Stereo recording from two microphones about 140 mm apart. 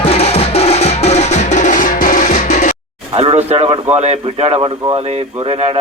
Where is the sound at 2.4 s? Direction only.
55° left (ahead or behind).